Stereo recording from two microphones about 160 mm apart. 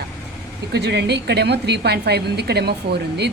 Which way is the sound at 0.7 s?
90° right.